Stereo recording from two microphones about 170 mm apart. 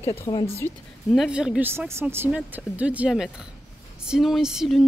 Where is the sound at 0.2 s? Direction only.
30° left (ahead or behind).